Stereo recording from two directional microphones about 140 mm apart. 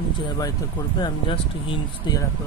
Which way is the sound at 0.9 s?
35° left (ahead or behind).